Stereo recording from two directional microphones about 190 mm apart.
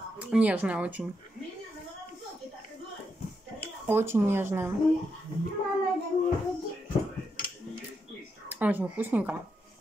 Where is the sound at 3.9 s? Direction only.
15° right (ahead or behind).